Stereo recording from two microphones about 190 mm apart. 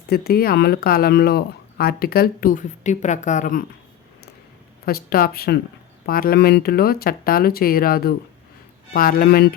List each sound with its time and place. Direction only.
0.1 s speech: 55° left (ahead or behind)
4.9 s speech: 50° left (ahead or behind)